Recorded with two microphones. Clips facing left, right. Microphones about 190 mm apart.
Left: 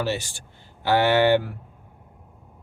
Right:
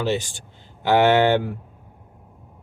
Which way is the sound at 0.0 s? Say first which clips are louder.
Right 3 dB; 15° right (ahead or behind).